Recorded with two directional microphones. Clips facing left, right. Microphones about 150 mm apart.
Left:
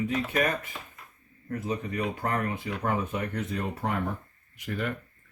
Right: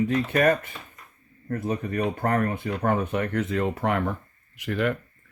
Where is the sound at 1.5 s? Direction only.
50° right (ahead or behind); by 4.9 s 85° right.